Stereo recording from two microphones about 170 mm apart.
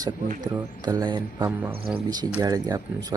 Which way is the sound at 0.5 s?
20° right (ahead or behind).